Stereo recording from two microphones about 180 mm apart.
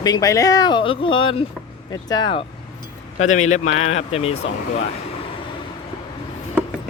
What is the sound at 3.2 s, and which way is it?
Speech, 40° left (ahead or behind).